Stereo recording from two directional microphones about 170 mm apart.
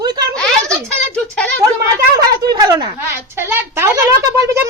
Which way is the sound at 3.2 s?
10° right (ahead or behind).